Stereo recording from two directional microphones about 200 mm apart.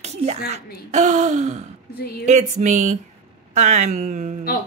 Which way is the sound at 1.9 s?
50° left (ahead or behind).